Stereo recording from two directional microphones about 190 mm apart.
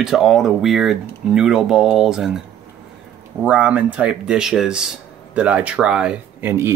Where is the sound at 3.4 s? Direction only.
5° right (ahead or behind).